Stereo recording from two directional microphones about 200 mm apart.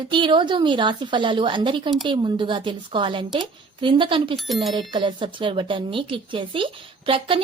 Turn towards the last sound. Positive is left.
turn(degrees=-25)  # may be behind; listen again after turning